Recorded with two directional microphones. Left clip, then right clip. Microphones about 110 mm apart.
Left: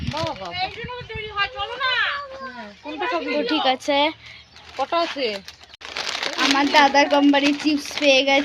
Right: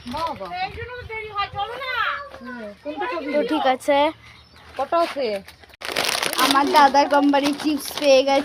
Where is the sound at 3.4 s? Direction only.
5° left (ahead or behind).